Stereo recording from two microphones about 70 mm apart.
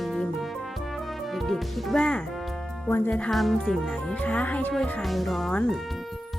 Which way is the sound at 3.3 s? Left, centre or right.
Centre.